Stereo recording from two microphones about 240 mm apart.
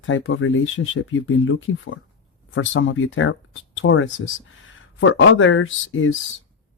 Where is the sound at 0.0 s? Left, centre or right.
Left.